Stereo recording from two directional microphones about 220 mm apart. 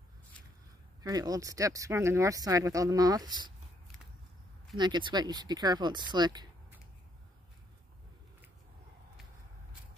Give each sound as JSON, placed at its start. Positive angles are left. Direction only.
{"t": 1.0, "sound": "speech", "side_deg": -15}
{"t": 4.7, "sound": "speech", "side_deg": -20}